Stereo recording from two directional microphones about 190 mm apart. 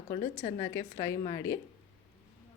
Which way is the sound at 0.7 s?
15° left (ahead or behind).